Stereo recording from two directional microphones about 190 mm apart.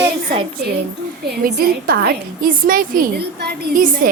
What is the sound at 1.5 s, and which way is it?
A woman's voice, 50° right (ahead or behind).